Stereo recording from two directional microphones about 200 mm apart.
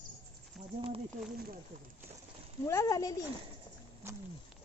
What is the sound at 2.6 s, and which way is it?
Speech, 15° left (ahead or behind).